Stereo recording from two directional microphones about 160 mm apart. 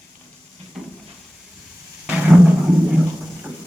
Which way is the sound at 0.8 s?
Centre (ahead or behind).